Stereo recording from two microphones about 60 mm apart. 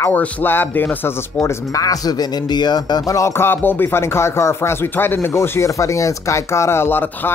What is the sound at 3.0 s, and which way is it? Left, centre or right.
Speech, left.